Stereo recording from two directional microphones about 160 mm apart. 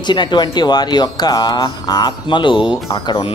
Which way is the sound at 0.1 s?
30° left (ahead or behind).